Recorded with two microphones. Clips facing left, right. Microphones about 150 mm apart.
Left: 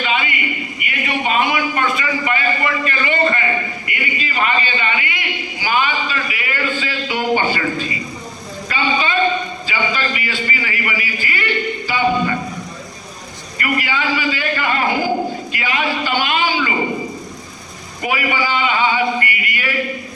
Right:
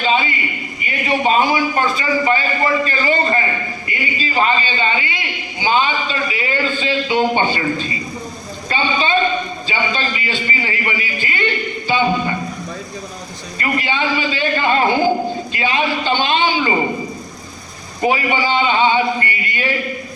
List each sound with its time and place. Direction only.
0.0 s a sound: 30° right (ahead or behind)
0.8 s a man's voice: 30° right (ahead or behind)
13.6 s a man's voice: 25° right (ahead or behind)
18.0 s a man's voice: 30° right (ahead or behind)